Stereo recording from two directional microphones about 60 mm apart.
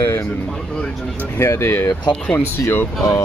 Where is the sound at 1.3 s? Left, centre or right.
Left.